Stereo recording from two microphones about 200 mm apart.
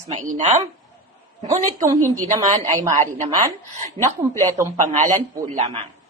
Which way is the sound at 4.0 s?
10° left (ahead or behind).